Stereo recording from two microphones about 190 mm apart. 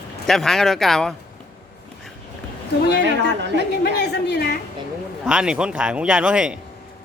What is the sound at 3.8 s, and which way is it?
Speech, 60° left (ahead or behind).